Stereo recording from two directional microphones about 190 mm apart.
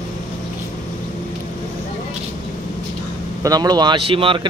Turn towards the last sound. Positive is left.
turn(degrees=-30)  # may be behind; listen again after turning